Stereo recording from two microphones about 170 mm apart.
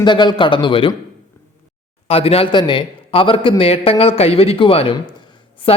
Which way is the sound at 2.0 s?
35° left (ahead or behind).